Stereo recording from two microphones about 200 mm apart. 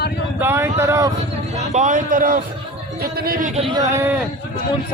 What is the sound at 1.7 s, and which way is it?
A man's voice, 40° right (ahead or behind).